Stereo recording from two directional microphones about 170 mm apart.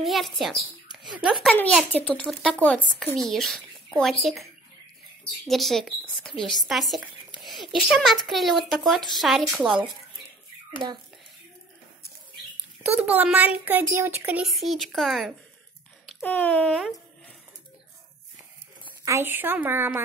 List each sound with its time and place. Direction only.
0.0 s speech: centre (ahead or behind)
5.5 s speech: centre (ahead or behind)
10.8 s a child's voice: 25° right (ahead or behind)
12.8 s a child's voice: 10° right (ahead or behind)
14.4 s speech: centre (ahead or behind)
18.9 s a child's voice: 15° right (ahead or behind)